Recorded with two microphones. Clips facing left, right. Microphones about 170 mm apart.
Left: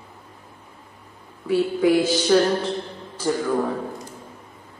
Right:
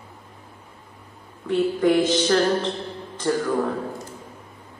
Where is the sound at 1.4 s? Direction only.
5° left (ahead or behind).